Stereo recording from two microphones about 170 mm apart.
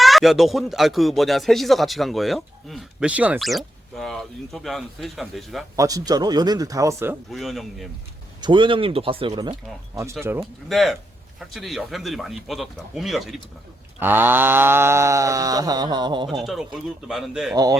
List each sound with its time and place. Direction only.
0.0 s speech: centre (ahead or behind)
5.7 s speech: 20° right (ahead or behind)
7.3 s speech: centre (ahead or behind)
8.4 s speech: 30° right (ahead or behind)
10.7 s speech: centre (ahead or behind)
14.0 s a sound: 10° right (ahead or behind)
16.4 s speech: centre (ahead or behind)
17.5 s speech: 20° right (ahead or behind)